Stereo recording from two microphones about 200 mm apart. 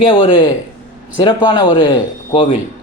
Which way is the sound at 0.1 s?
25° left (ahead or behind).